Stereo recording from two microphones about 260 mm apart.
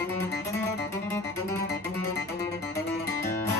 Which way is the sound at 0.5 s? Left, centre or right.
Centre.